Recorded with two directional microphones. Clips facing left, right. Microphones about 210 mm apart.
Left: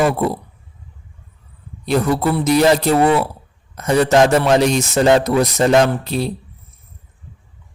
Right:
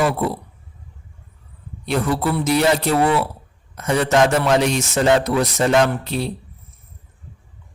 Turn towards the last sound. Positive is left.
turn(degrees=35)  # may be behind; listen again after turning